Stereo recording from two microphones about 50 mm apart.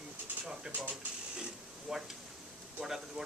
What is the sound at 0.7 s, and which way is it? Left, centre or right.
Speech, centre.